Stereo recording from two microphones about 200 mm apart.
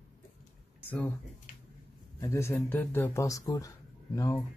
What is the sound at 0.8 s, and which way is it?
Speech, 10° left (ahead or behind).